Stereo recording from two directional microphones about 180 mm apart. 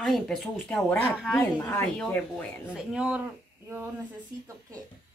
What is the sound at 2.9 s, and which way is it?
Speech, 5° right (ahead or behind).